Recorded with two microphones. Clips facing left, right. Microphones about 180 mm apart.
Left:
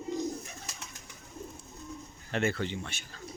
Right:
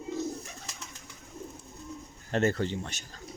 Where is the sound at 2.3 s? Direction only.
40° right (ahead or behind).